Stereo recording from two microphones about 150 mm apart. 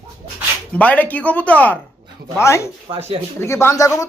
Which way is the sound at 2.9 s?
40° right (ahead or behind).